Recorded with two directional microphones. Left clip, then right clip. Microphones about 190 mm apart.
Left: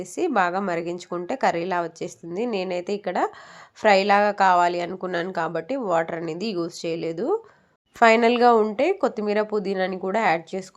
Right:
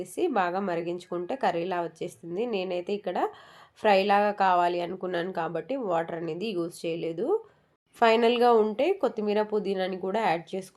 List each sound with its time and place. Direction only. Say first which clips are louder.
0.0 s speech: left 5 dB; 15° left (ahead or behind)